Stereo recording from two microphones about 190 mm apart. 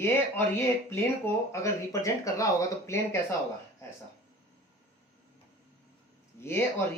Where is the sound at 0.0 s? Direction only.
10° left (ahead or behind).